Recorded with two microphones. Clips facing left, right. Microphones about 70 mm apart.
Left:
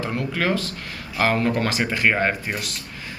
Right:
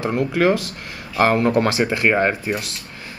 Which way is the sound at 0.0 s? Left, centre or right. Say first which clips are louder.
Right 6 dB; centre.